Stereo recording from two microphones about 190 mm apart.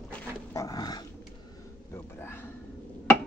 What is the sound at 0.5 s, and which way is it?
Dog, 20° left (ahead or behind).